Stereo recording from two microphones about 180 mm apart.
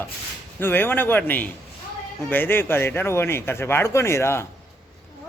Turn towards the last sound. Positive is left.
turn(degrees=15)  # may be behind; listen again after turning